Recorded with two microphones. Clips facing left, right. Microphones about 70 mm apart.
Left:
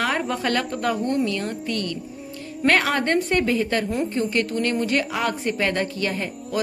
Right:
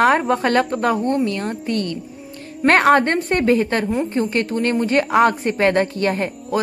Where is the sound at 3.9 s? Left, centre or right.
Right.